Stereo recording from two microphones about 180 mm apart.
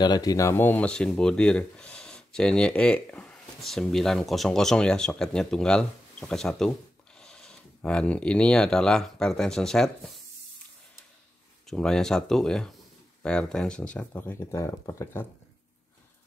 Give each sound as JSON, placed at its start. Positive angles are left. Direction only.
{"t": 0.0, "sound": "speech", "side_deg": 20}
{"t": 11.6, "sound": "speech", "side_deg": 5}